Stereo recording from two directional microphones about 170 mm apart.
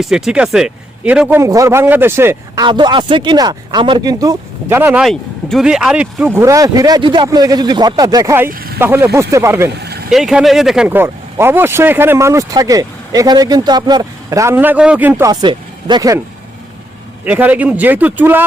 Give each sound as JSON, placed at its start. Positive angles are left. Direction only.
{"t": 0.0, "sound": "speech", "side_deg": -5}
{"t": 1.4, "sound": "speech", "side_deg": -20}
{"t": 2.6, "sound": "speech", "side_deg": -30}
{"t": 8.4, "sound": "speech", "side_deg": -60}
{"t": 8.8, "sound": "speech", "side_deg": -15}
{"t": 10.1, "sound": "speech", "side_deg": 0}
{"t": 15.3, "sound": "speech", "side_deg": -25}
{"t": 17.2, "sound": "speech", "side_deg": -10}